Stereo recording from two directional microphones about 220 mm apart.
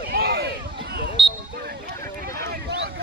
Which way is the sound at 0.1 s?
45° right (ahead or behind).